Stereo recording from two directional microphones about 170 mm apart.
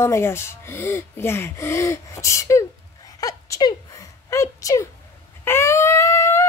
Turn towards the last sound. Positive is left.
turn(degrees=15)  # may be behind; listen again after turning